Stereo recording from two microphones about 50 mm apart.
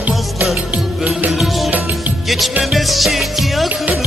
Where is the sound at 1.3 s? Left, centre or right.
Centre.